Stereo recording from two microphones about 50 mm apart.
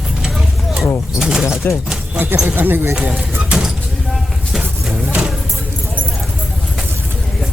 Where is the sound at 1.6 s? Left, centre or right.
Left.